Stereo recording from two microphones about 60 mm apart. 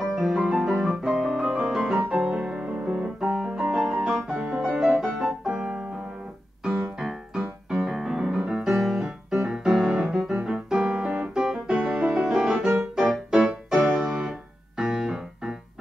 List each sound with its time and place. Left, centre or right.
0.0 s music: centre
2.0 s music: centre
3.3 s piano: right
3.5 s piano: centre
3.9 s music: centre
5.4 s piano: centre
6.6 s music: centre
12.1 s music: centre